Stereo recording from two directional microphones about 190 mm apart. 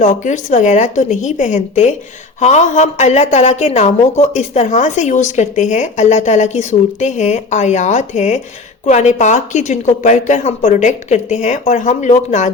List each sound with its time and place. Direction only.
0.0 s a woman's voice: 40° left (ahead or behind)